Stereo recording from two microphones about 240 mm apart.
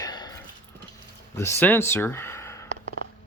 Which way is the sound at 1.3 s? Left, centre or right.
Centre.